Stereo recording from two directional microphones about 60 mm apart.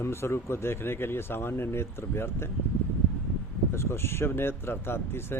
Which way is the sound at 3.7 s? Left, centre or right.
Left.